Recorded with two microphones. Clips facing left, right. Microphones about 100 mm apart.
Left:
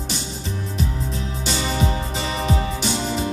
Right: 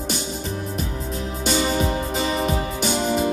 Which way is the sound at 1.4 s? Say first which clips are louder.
Right 3 dB; 45° right (ahead or behind).